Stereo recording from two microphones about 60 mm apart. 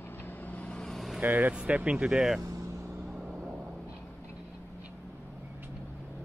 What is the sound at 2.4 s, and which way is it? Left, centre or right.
Vehicle, right.